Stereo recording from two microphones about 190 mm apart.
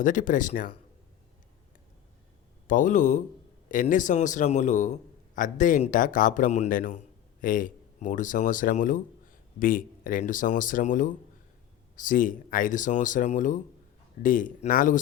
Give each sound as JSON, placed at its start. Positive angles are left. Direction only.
{"t": 0.0, "sound": "a man's voice", "side_deg": 45}
{"t": 2.6, "sound": "a man's voice", "side_deg": 40}